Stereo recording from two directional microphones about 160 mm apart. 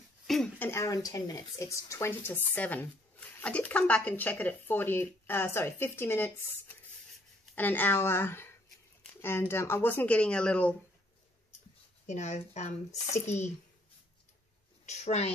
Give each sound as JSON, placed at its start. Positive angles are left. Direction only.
{"t": 0.3, "sound": "speech", "side_deg": 0}
{"t": 0.7, "sound": "speech", "side_deg": 20}
{"t": 7.5, "sound": "speech", "side_deg": 10}
{"t": 12.1, "sound": "speech", "side_deg": 50}
{"t": 14.9, "sound": "a woman's voice", "side_deg": 45}